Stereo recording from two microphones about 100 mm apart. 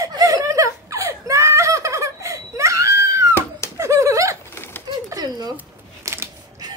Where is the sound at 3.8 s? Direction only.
30° right (ahead or behind).